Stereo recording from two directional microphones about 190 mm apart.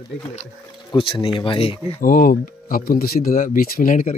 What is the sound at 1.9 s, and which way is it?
Speech, 45° left (ahead or behind).